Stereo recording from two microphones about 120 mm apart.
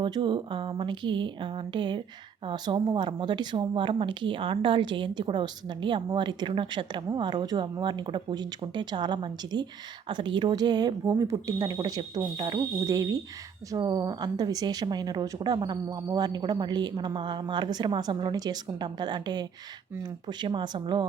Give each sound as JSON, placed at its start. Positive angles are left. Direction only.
{"t": 0.0, "sound": "a woman's voice", "side_deg": -40}